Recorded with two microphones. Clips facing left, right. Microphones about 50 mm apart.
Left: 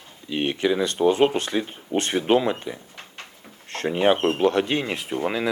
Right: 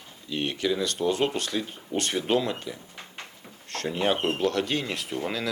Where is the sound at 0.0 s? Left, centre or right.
Left.